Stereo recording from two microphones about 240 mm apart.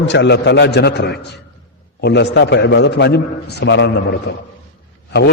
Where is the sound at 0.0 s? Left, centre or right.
Left.